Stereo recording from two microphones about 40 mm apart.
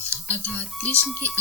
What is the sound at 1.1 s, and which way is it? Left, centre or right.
Speech, left.